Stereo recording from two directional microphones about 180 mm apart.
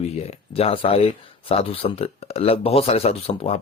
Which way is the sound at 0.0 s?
35° left (ahead or behind).